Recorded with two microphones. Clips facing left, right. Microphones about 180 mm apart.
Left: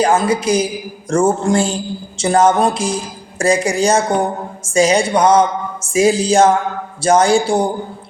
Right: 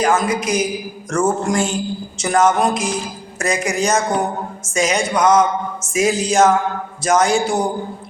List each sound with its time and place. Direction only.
0.0 s a woman's voice: 30° left (ahead or behind)